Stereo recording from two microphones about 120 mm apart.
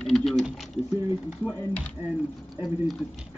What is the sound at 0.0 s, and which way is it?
Typing, 5° left (ahead or behind).